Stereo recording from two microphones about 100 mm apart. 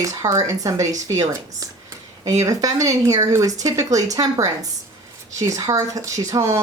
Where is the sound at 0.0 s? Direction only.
35° right (ahead or behind).